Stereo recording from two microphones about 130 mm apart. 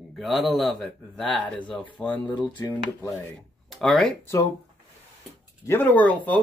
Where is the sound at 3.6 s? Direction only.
Centre (ahead or behind).